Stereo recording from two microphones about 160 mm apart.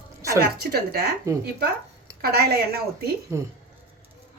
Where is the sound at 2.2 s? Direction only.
75° right (ahead or behind).